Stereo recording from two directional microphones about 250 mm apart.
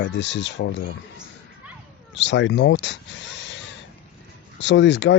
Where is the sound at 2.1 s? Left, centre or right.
Left.